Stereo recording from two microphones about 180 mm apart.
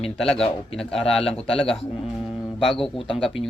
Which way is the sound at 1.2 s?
30° left (ahead or behind).